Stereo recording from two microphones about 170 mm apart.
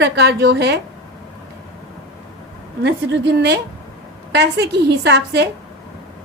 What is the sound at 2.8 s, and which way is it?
A woman's voice, 85° right.